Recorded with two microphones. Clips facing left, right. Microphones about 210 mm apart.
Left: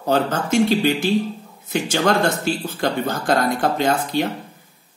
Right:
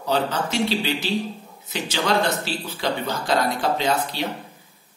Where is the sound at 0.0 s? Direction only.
50° left (ahead or behind).